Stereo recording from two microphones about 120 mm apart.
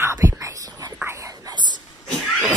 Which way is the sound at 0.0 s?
20° right (ahead or behind).